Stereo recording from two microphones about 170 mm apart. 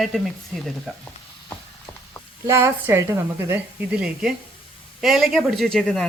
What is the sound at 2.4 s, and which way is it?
A woman's voice, 15° right (ahead or behind).